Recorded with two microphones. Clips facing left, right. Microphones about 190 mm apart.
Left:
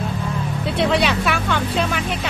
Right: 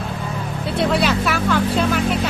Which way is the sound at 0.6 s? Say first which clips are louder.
Even; centre (ahead or behind).